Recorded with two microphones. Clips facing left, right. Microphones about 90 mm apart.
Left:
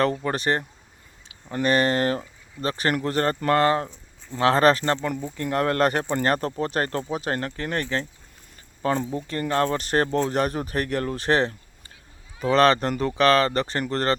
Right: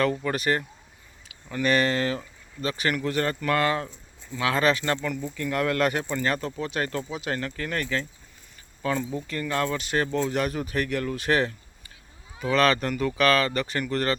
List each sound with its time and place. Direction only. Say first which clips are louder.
0.0 s speech: left 2 dB; 35° left (ahead or behind)